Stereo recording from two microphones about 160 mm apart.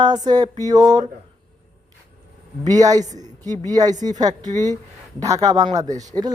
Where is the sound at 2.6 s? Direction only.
25° right (ahead or behind).